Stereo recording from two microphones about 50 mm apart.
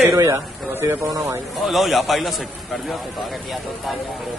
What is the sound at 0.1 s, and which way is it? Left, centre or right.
Speech, right.